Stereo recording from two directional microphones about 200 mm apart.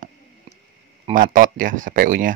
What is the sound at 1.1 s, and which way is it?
Speech, 45° right (ahead or behind).